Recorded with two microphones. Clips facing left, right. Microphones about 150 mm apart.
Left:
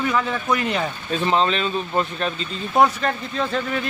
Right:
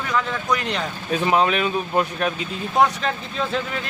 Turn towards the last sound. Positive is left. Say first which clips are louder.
# left 1 dB
turn(degrees=0)  # may be behind; listen again after turning